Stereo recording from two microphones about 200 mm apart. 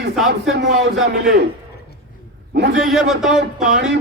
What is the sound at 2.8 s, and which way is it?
Speech, centre (ahead or behind).